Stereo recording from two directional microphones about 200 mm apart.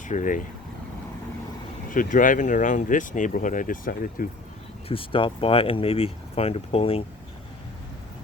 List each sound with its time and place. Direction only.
0.1 s speech: 40° left (ahead or behind)
1.9 s speech: 40° left (ahead or behind)
4.9 s speech: 25° left (ahead or behind)